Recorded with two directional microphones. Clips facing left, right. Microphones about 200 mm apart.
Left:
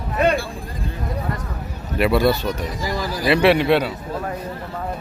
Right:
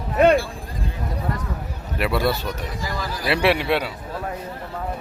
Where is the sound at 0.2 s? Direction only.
55° right (ahead or behind).